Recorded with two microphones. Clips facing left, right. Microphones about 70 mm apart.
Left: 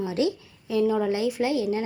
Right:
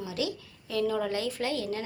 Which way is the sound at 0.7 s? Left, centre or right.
Centre.